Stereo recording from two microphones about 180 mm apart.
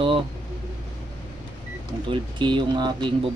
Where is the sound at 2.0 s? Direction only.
25° right (ahead or behind).